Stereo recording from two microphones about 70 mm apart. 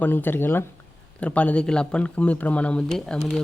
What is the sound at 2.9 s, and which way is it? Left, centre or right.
Speech, centre.